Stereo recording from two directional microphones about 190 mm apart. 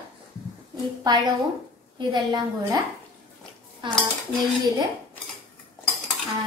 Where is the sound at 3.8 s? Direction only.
25° right (ahead or behind).